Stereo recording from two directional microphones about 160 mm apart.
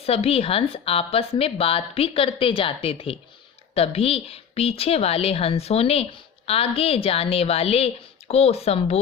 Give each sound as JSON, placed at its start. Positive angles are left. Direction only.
{"t": 0.0, "sound": "a woman's voice", "side_deg": 40}